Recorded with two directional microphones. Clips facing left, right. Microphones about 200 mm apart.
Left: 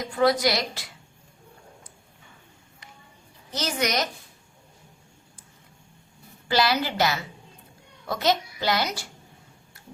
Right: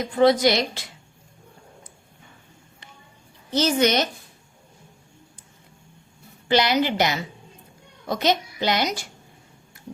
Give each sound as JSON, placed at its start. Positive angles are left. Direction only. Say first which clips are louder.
{"t": 0.0, "sound": "a child's voice", "louder": "right 4 dB", "side_deg": -25}
{"t": 3.5, "sound": "a child's voice", "louder": "right 7 dB", "side_deg": -25}
{"t": 6.5, "sound": "a child's voice", "louder": "right 4 dB", "side_deg": -20}